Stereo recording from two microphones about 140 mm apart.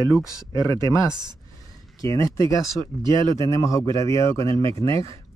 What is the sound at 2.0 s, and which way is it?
Speech, 20° left (ahead or behind).